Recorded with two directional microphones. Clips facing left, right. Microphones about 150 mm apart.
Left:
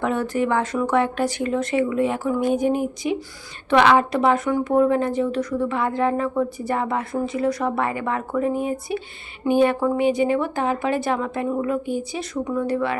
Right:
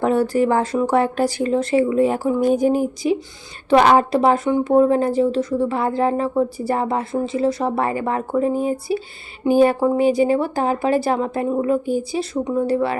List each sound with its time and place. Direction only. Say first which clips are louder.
0.0 s speech: right 5 dB; 35° right (ahead or behind)